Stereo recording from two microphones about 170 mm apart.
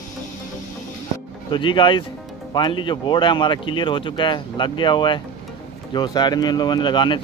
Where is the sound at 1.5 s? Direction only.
30° left (ahead or behind).